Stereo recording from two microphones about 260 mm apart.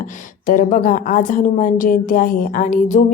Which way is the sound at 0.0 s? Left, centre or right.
Left.